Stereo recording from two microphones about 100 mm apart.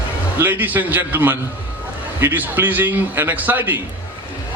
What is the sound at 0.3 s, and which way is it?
A man's voice, 20° right (ahead or behind).